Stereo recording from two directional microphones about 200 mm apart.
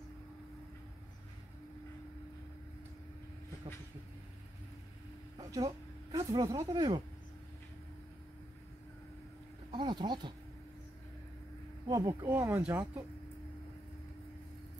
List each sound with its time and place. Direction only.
5.4 s speech: 15° right (ahead or behind)
9.7 s speech: 20° right (ahead or behind)
11.9 s speech: 15° right (ahead or behind)